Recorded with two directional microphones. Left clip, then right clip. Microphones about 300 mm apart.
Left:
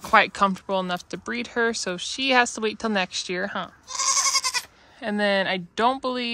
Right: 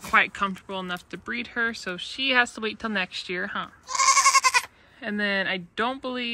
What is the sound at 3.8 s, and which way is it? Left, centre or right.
Goat, centre.